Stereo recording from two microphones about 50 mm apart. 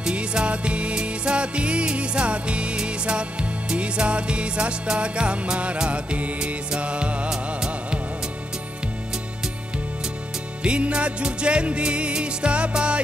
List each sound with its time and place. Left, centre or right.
0.0 s music: centre
10.6 s music: right